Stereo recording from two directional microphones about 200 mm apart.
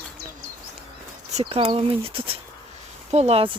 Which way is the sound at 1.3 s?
30° right (ahead or behind).